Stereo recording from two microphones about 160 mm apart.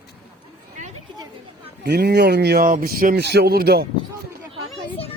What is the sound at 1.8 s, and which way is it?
Speech, 90° right.